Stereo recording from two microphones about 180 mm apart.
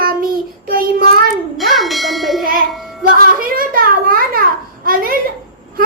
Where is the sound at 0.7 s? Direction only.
55° right (ahead or behind).